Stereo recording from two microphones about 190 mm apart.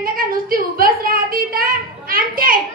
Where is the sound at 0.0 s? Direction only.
50° right (ahead or behind).